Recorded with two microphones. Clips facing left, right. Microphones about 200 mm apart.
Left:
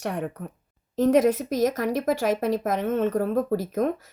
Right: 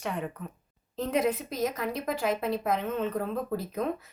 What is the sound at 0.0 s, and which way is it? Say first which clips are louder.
Speech: left 4 dB; 70° left (ahead or behind).